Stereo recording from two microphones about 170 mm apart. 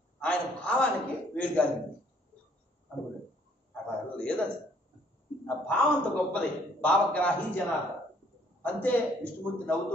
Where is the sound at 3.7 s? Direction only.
5° left (ahead or behind).